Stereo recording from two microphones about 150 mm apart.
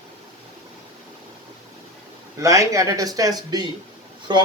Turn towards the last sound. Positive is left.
turn(degrees=-30)  # may be behind; listen again after turning